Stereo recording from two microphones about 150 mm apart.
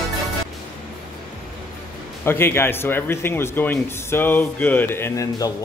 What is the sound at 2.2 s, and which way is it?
Speech, 15° left (ahead or behind).